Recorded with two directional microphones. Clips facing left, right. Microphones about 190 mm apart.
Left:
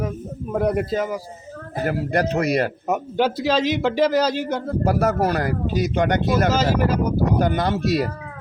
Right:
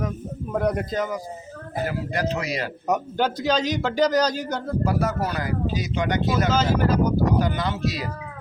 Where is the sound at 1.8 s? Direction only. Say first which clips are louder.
Left 6 dB; 55° left (ahead or behind).